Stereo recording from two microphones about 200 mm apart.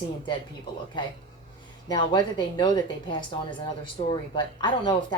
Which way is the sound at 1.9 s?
20° left (ahead or behind).